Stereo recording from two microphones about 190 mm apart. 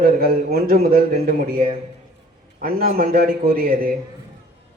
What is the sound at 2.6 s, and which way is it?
A man's voice, 50° right (ahead or behind).